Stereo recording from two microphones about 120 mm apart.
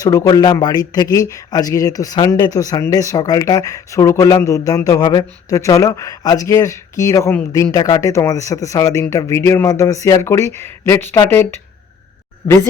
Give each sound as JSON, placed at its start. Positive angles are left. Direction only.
{"t": 0.0, "sound": "speech", "side_deg": 30}